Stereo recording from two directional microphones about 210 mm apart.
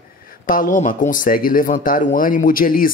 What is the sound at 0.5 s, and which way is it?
Speech, 40° left (ahead or behind).